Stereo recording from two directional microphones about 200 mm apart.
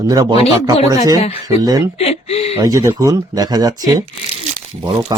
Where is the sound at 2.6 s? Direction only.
15° right (ahead or behind).